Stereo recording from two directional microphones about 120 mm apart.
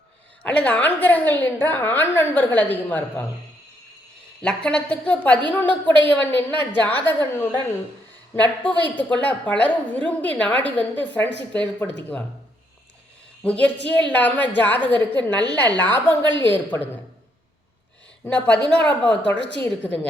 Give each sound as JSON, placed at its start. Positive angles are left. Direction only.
{"t": 0.4, "sound": "a woman's voice", "side_deg": 10}
{"t": 4.4, "sound": "a woman's voice", "side_deg": 10}
{"t": 8.4, "sound": "a woman's voice", "side_deg": 15}
{"t": 13.4, "sound": "a woman's voice", "side_deg": 10}
{"t": 18.3, "sound": "a woman's voice", "side_deg": 10}